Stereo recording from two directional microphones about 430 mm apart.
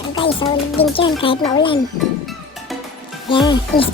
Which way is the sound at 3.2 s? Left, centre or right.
Centre.